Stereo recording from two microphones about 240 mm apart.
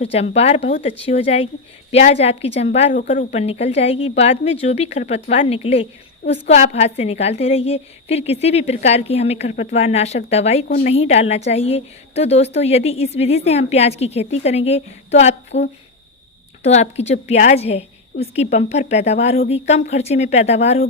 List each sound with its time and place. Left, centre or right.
0.0 s a woman's voice: left
10.7 s a woman's voice: left
10.9 s a woman's voice: left
16.6 s a woman's voice: left